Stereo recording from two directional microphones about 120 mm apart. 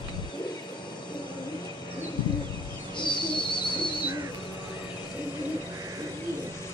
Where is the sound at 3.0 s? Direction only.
40° left (ahead or behind).